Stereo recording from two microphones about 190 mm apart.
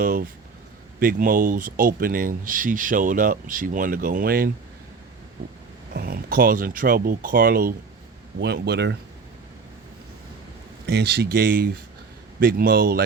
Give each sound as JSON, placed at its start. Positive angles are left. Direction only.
{"t": 0.0, "sound": "speech", "side_deg": -45}
{"t": 5.9, "sound": "speech", "side_deg": -55}
{"t": 10.8, "sound": "speech", "side_deg": -60}